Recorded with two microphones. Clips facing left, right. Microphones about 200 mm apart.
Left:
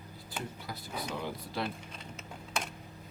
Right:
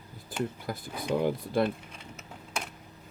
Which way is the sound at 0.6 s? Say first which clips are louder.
Right 6 dB; 50° right (ahead or behind).